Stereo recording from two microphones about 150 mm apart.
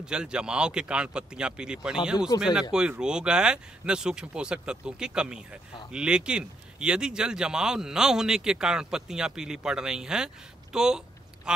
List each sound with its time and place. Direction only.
0.0 s a man's voice: 5° right (ahead or behind)
2.3 s speech: 20° left (ahead or behind)
2.7 s a man's voice: 5° right (ahead or behind)